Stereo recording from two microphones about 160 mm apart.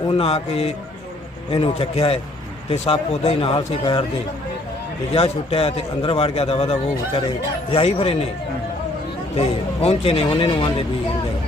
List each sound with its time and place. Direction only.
0.2 s a man's voice: 40° left (ahead or behind)
5.1 s a man's voice: 40° left (ahead or behind)
9.3 s a man's voice: 40° left (ahead or behind)